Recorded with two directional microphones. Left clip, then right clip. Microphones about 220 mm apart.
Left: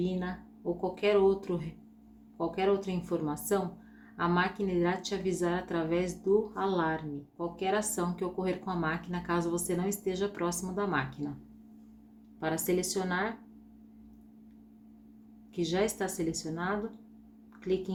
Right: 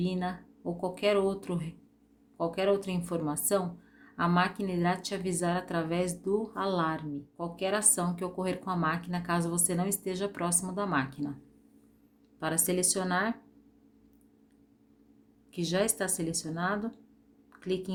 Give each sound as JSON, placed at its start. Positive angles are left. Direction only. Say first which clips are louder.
{"t": 0.0, "sound": "speech", "louder": "right 1 dB", "side_deg": -55}
{"t": 12.4, "sound": "speech", "louder": "even", "side_deg": -50}
{"t": 15.5, "sound": "speech", "louder": "right 1 dB", "side_deg": -55}